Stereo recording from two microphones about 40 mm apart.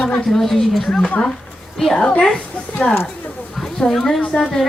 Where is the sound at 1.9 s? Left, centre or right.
Left.